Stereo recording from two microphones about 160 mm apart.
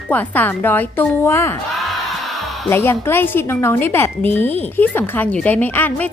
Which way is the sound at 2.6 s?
15° left (ahead or behind).